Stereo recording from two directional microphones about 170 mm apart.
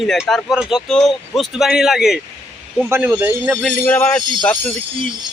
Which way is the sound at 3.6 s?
10° left (ahead or behind).